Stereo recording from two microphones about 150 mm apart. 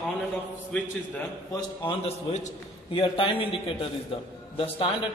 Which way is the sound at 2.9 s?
35° left (ahead or behind).